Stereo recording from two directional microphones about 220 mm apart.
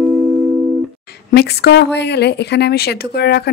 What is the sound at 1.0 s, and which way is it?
Speech, 45° left (ahead or behind).